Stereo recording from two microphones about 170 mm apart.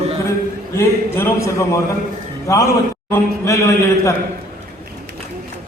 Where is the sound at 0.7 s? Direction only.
15° left (ahead or behind).